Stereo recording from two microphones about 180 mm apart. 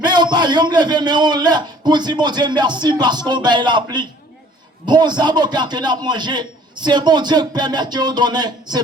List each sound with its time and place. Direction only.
0.0 s a man's voice: 25° right (ahead or behind)